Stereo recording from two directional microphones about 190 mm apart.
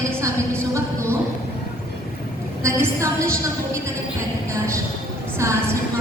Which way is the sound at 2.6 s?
15° right (ahead or behind).